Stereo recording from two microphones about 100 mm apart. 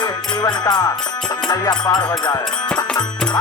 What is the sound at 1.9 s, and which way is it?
Music, 45° left (ahead or behind).